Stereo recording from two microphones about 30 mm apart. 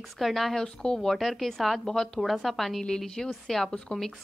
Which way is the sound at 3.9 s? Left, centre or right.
Left.